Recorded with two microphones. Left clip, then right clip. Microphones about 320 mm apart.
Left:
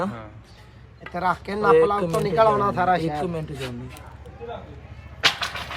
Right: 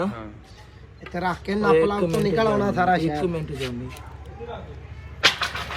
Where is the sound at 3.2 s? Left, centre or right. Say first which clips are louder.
Right 2 dB; centre.